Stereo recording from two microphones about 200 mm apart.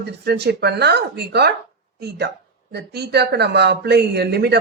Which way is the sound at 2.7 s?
55° right (ahead or behind).